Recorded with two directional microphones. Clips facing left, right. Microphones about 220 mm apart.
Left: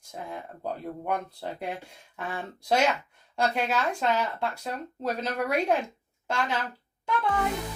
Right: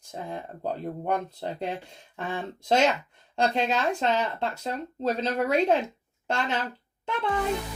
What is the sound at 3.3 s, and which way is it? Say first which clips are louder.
Speech: right 2 dB; 25° right (ahead or behind).